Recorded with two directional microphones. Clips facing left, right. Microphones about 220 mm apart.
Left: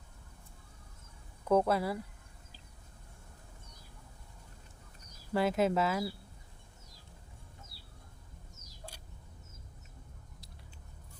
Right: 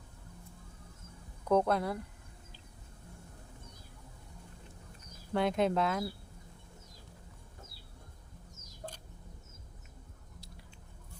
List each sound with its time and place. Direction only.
1.5 s speech: 5° left (ahead or behind)
5.3 s speech: 5° left (ahead or behind)
8.8 s a sound: 45° right (ahead or behind)